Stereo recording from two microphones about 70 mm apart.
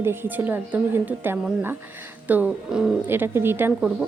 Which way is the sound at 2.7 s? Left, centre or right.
Centre.